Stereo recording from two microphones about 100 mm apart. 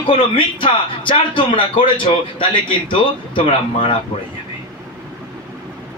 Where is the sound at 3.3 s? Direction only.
75° left (ahead or behind).